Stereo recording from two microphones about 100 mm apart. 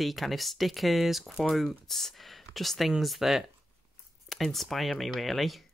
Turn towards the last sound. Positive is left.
turn(degrees=0)  # may be behind; listen again after turning